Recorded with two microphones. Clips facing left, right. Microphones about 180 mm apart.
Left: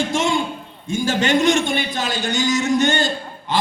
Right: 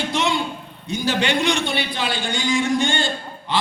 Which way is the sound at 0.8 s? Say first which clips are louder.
Left 2 dB; 45° left (ahead or behind).